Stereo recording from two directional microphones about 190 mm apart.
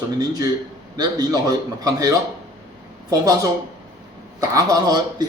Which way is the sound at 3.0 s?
20° right (ahead or behind).